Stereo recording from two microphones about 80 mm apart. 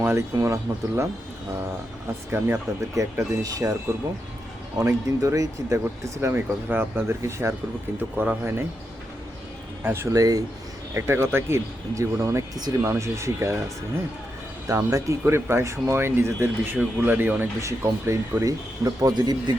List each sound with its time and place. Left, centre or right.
0.0 s speech: right
0.3 s speech: right
2.3 s speech: right
4.8 s speech: right
5.8 s speech: right
8.1 s speech: centre
9.8 s speech: right
10.1 s speech: right
10.9 s speech: right
12.5 s speech: right
12.9 s speech: right
14.8 s speech: right
17.6 s speech: right
18.9 s speech: right